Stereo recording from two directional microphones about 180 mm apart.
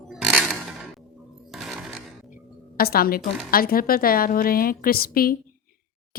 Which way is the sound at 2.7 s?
55° left (ahead or behind).